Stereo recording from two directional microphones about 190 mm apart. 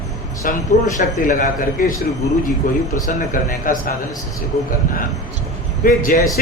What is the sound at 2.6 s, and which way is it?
Speech, 45° left (ahead or behind).